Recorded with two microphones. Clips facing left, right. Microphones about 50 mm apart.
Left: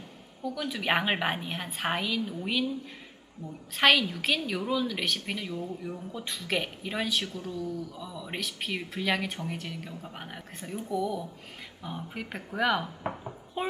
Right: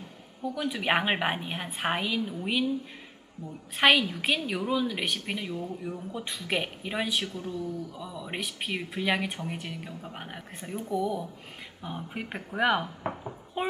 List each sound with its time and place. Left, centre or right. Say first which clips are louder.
0.4 s speech: right 1 dB; centre
3.8 s speech: right 1 dB; centre
5.5 s speech: right 1 dB; right
6.1 s speech: even; centre
7.3 s speech: right 1 dB; right; by 10.7 s centre
10.8 s speech: right 1 dB; right
11.8 s speech: right 1 dB; centre
13.0 s a sound: right 1 dB; centre